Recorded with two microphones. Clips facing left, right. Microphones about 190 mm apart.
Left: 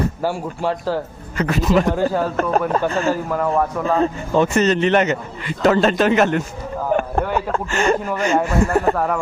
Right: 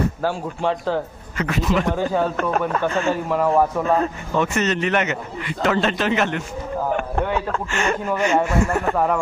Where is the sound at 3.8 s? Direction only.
30° left (ahead or behind).